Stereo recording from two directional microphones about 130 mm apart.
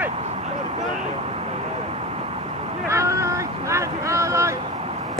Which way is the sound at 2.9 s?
25° right (ahead or behind).